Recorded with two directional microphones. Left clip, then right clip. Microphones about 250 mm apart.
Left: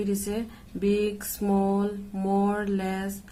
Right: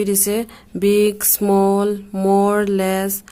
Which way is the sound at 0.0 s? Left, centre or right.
Right.